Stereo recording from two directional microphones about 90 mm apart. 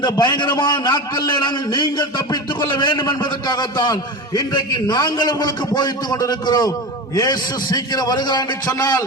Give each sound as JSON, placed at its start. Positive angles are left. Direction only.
{"t": 0.0, "sound": "a man's voice", "side_deg": 60}